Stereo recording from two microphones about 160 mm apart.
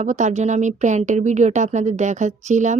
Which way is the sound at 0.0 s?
45° right (ahead or behind).